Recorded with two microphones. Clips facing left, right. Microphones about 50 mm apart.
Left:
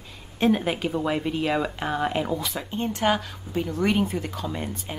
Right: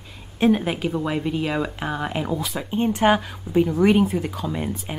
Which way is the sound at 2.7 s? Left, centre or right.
Centre.